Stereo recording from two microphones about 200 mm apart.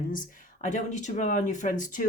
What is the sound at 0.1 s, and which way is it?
Speech, 40° left (ahead or behind).